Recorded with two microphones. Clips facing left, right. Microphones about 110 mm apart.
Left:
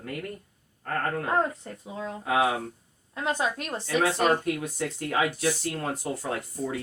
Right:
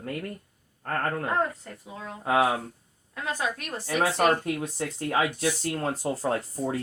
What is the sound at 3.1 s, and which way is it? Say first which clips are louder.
Speech: left 3 dB; 25° left (ahead or behind).